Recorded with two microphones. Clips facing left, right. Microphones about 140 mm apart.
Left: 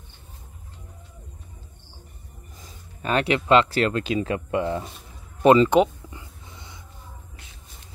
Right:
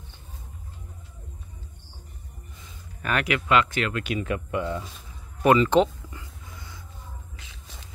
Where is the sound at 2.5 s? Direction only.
40° left (ahead or behind).